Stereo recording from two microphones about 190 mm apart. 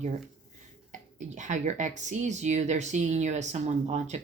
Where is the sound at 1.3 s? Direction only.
40° right (ahead or behind).